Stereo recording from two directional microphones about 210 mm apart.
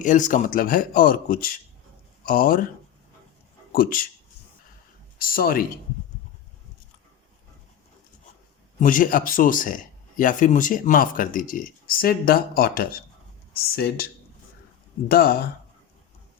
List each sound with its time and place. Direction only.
0.0 s speech: 35° left (ahead or behind)
3.7 s speech: 45° left (ahead or behind)
5.1 s speech: 45° left (ahead or behind)
8.8 s speech: 40° left (ahead or behind)
15.1 s speech: 45° left (ahead or behind)